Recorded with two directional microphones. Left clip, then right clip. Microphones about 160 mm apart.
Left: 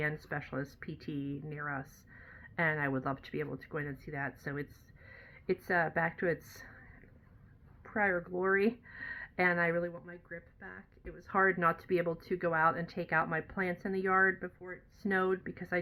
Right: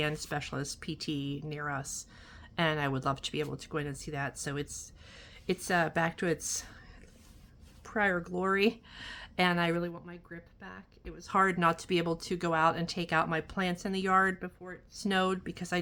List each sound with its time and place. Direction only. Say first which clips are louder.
0.3 s speech: right 2 dB; 35° right (ahead or behind)
1.2 s speech: right 3 dB; 45° right (ahead or behind)
1.5 s speech: right 4 dB; 35° right (ahead or behind)
3.4 s speech: right 2 dB; 25° right (ahead or behind)
3.7 s speech: right 3 dB; 40° right (ahead or behind)
7.9 s speech: right 2 dB; 35° right (ahead or behind)